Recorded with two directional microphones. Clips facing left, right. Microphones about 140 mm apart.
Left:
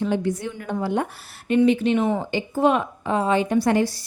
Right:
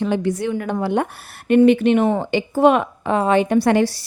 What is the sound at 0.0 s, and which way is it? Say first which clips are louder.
A woman's voice: right 3 dB; 80° right.